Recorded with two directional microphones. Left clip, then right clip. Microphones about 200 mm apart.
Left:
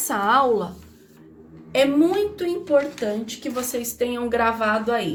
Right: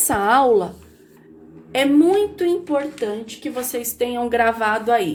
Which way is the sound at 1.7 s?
30° right (ahead or behind).